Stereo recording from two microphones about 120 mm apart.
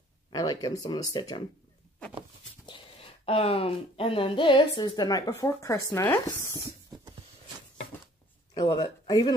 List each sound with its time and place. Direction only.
0.3 s speech: 35° left (ahead or behind)
2.6 s speech: 45° left (ahead or behind); by 6.2 s 25° left (ahead or behind)
8.5 s speech: 35° left (ahead or behind)